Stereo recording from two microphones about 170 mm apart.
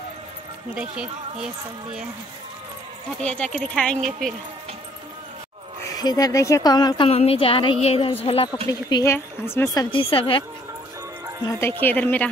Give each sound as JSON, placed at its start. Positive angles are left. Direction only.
{"t": 0.7, "sound": "speech", "side_deg": -5}
{"t": 3.2, "sound": "a woman's voice", "side_deg": 5}
{"t": 5.8, "sound": "speech", "side_deg": 20}
{"t": 7.1, "sound": "a woman's voice", "side_deg": 35}
{"t": 8.6, "sound": "speech", "side_deg": 20}
{"t": 9.8, "sound": "a woman's voice", "side_deg": 30}
{"t": 11.8, "sound": "a woman's voice", "side_deg": 10}